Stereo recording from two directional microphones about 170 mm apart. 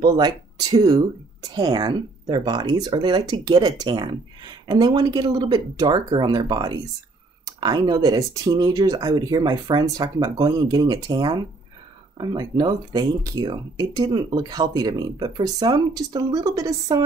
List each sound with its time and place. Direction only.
0.0 s speech: 25° right (ahead or behind)